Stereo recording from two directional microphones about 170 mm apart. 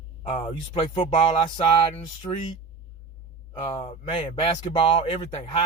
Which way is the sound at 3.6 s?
30° left (ahead or behind).